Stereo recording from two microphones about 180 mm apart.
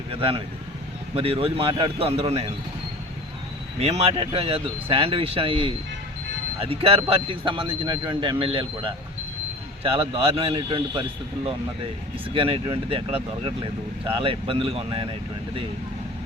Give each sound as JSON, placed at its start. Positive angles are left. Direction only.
{"t": 0.1, "sound": "speech", "side_deg": -30}
{"t": 3.8, "sound": "a man's voice", "side_deg": -35}
{"t": 12.3, "sound": "a man's voice", "side_deg": -30}